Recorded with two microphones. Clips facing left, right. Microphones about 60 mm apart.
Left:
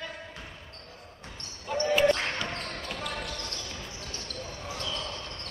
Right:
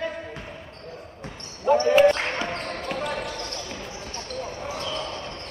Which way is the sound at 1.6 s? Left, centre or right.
Right.